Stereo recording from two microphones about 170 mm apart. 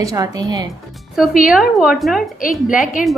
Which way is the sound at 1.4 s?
Centre (ahead or behind).